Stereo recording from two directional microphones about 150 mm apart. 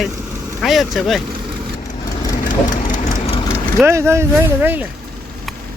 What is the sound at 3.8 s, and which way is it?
Speech, 15° right (ahead or behind).